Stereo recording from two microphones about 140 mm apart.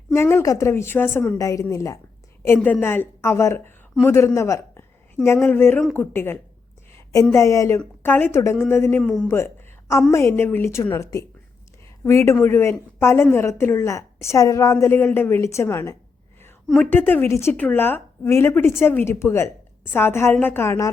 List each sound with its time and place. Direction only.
0.1 s a woman's voice: 20° left (ahead or behind)
1.4 s a woman's voice: 25° left (ahead or behind)
6.9 s a sound: 25° left (ahead or behind)
7.3 s a woman's voice: 20° left (ahead or behind); by 9.3 s 5° left (ahead or behind)
10.1 s a woman's voice: 20° left (ahead or behind)
16.6 s a woman's voice: centre (ahead or behind)
16.9 s a woman's voice: 15° left (ahead or behind)